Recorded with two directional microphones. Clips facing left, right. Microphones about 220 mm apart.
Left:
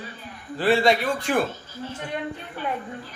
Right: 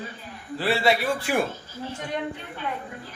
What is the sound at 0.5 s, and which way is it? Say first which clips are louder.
Speech: left 3 dB; 5° right (ahead or behind).